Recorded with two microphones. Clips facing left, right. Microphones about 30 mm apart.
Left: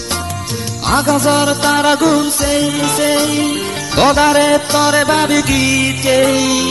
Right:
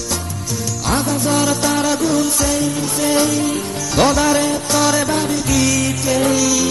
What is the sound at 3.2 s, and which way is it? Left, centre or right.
Music, left.